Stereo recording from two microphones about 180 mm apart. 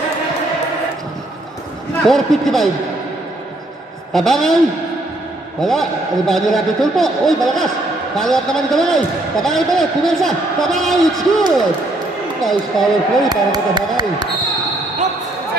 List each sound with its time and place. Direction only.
2.0 s a man's voice: centre (ahead or behind)
4.1 s a man's voice: centre (ahead or behind)
5.6 s a man's voice: centre (ahead or behind)
13.3 s speech: 25° right (ahead or behind)